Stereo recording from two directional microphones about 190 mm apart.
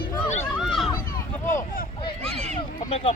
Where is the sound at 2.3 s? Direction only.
35° right (ahead or behind).